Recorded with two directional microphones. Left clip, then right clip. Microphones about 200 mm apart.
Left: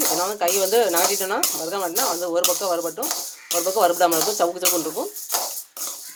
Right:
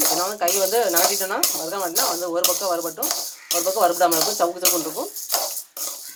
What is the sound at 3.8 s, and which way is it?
Speech, 25° left (ahead or behind).